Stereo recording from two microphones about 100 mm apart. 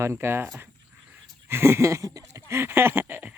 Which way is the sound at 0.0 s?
25° right (ahead or behind).